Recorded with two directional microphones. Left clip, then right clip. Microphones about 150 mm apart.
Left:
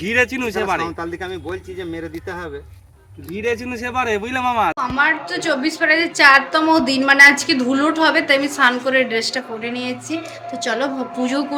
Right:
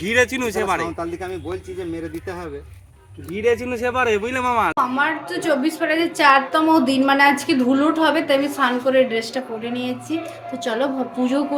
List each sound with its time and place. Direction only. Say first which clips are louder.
0.0 s speech: even; 25° left (ahead or behind)
3.7 s speech: right 1 dB; 60° left (ahead or behind)
4.8 s a woman's voice: left 2 dB; 5° right (ahead or behind)